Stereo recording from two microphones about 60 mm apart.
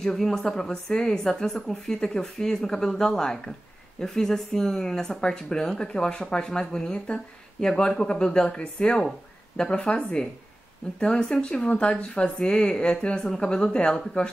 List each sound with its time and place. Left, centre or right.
0.0 s speech: centre